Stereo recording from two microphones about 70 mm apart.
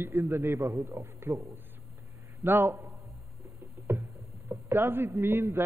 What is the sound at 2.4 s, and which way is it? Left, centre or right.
Speech, right.